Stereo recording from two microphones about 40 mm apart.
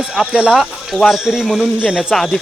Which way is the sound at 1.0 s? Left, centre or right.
Centre.